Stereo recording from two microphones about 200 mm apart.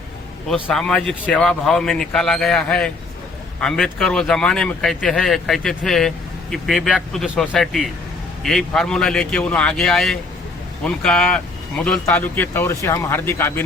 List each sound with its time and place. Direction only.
0.4 s speech: centre (ahead or behind)